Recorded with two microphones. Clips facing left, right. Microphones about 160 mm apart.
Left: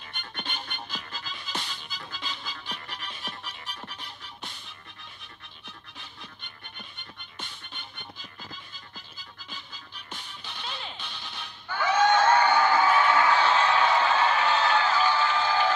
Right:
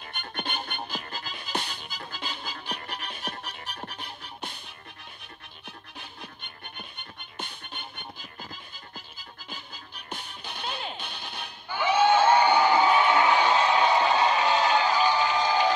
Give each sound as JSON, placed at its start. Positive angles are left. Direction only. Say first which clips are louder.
{"t": 0.1, "sound": "music", "louder": "right 4 dB", "side_deg": -50}
{"t": 7.0, "sound": "music", "louder": "right 5 dB", "side_deg": -55}
{"t": 9.5, "sound": "music", "louder": "right 3 dB", "side_deg": -50}
{"t": 11.7, "sound": "crowd", "louder": "right 1 dB", "side_deg": -10}